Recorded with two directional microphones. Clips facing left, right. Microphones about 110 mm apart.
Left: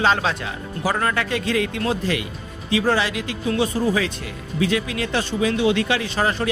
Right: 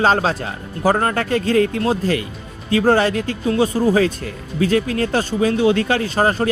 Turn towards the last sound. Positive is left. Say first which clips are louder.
# right 5 dB
turn(degrees=-40)  # may be behind; listen again after turning